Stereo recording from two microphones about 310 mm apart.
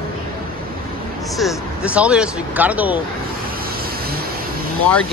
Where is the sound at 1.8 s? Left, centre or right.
Centre.